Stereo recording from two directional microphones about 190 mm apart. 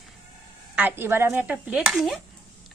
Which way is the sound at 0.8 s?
10° right (ahead or behind).